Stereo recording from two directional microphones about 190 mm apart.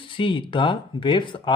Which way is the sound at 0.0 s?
25° left (ahead or behind).